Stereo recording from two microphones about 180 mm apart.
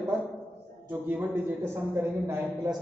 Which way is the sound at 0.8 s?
10° right (ahead or behind).